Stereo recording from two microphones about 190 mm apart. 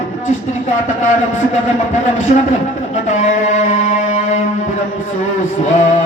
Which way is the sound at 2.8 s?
40° left (ahead or behind).